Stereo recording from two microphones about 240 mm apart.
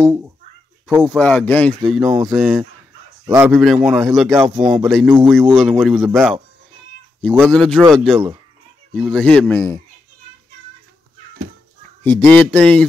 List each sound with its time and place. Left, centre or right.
0.0 s speech: centre
0.8 s a man's voice: centre
4.4 s speech: centre
4.7 s a man's voice: centre
12.0 s a man's voice: centre